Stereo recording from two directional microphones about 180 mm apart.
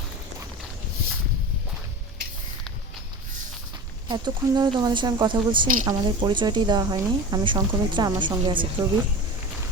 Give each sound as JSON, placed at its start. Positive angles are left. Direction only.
{"t": 4.1, "sound": "speech", "side_deg": -25}